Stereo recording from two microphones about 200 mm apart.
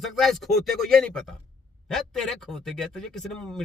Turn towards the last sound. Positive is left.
turn(degrees=5)  # may be behind; listen again after turning